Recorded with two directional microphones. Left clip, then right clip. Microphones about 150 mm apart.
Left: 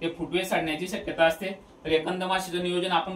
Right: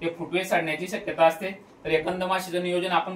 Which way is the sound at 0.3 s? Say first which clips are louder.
Right 2 dB; 20° right (ahead or behind).